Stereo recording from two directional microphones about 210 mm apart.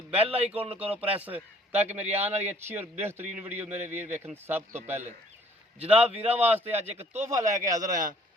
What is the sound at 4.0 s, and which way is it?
Speech, 35° right (ahead or behind).